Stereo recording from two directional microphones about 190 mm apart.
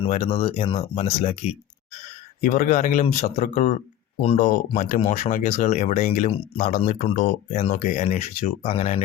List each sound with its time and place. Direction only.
0.0 s speech: 30° left (ahead or behind)
2.4 s speech: 45° left (ahead or behind)